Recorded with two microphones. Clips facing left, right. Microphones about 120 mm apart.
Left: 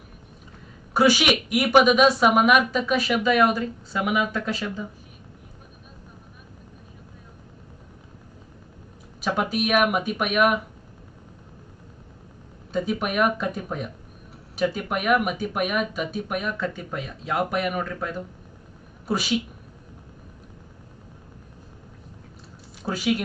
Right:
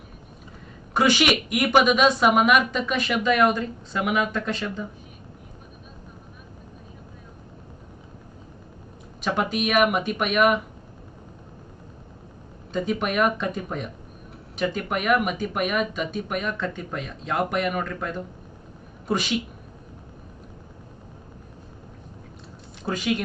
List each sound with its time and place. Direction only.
0.9 s a woman's voice: 5° left (ahead or behind)
9.2 s a woman's voice: 5° left (ahead or behind)
12.7 s a woman's voice: 5° left (ahead or behind)
22.9 s a woman's voice: 5° left (ahead or behind)